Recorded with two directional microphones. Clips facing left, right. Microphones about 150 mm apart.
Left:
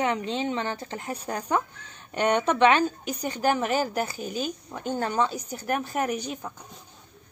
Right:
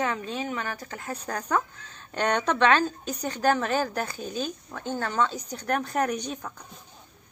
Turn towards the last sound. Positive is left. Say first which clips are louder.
# even
turn(degrees=5)  # may be behind; listen again after turning